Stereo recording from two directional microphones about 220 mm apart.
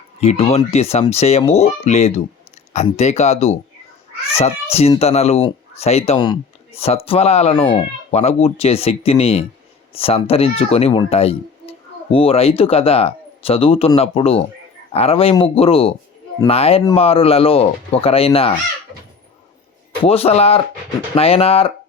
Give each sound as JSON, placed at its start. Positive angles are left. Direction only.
{"t": 0.2, "sound": "speech", "side_deg": 30}
{"t": 20.1, "sound": "speech", "side_deg": 25}